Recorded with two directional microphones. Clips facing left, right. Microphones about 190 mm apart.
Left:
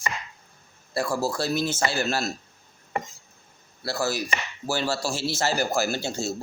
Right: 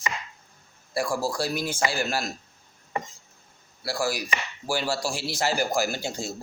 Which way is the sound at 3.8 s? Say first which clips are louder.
Left 1 dB; 10° right (ahead or behind).